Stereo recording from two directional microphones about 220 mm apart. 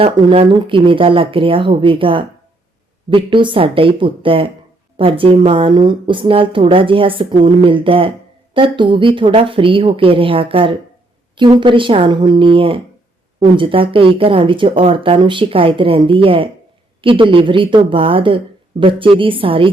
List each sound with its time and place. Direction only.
0.0 s a woman's voice: 25° right (ahead or behind)